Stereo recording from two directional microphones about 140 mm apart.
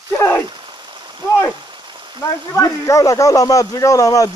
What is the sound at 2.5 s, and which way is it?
Speech, 25° left (ahead or behind).